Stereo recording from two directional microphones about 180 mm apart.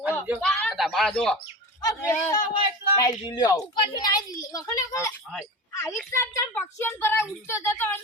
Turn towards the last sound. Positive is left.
turn(degrees=15)  # may be behind; listen again after turning